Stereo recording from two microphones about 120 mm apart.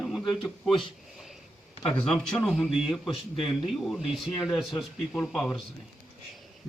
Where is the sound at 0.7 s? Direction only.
45° left (ahead or behind).